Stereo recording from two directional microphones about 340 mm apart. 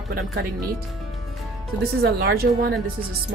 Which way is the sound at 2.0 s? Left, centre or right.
Right.